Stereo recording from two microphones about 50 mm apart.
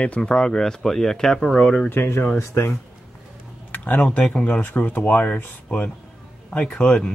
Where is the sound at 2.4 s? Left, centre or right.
Left.